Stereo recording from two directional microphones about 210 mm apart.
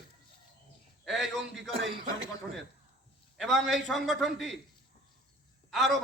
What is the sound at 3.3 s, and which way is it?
A man's voice, centre (ahead or behind).